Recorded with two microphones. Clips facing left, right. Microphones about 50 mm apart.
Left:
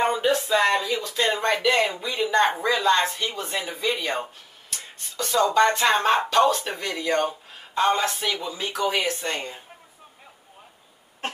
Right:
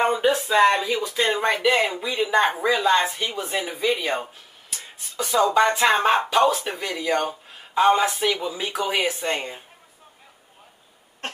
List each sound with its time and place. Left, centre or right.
0.2 s speech: centre